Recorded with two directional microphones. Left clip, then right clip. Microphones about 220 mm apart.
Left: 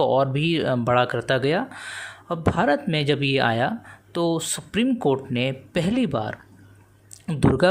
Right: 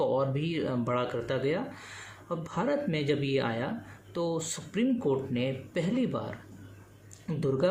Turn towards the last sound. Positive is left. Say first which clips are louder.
# left 9 dB
turn(degrees=45)  # may be behind; listen again after turning